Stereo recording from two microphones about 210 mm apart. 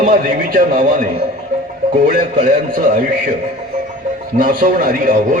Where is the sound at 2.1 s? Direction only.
45° right (ahead or behind).